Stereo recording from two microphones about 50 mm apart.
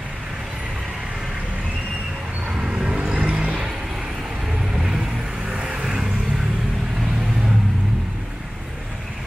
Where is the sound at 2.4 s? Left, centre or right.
Centre.